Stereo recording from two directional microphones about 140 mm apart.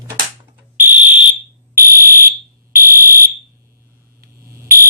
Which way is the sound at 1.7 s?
90° right.